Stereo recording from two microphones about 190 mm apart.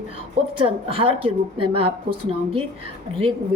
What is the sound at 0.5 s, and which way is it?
A woman's voice, 30° right (ahead or behind).